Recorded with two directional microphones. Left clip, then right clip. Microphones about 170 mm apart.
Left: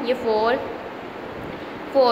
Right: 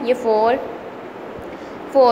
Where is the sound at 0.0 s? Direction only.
15° right (ahead or behind).